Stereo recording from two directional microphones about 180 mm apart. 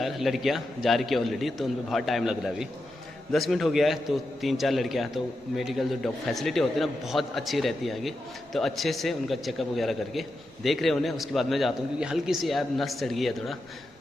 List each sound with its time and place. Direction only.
0.0 s a man's voice: centre (ahead or behind)